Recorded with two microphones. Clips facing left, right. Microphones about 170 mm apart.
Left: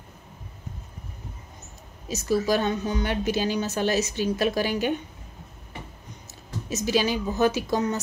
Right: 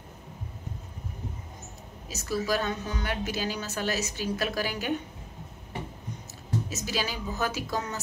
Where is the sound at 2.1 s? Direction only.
20° left (ahead or behind).